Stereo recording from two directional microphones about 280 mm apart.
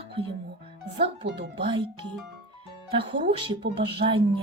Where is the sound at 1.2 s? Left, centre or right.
Right.